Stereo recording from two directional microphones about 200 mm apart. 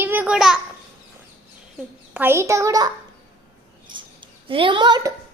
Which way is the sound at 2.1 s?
10° right (ahead or behind).